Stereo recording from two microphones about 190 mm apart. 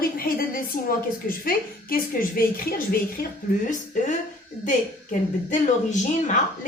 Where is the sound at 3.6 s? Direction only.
40° left (ahead or behind).